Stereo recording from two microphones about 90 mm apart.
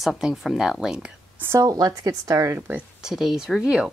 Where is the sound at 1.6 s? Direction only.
45° right (ahead or behind).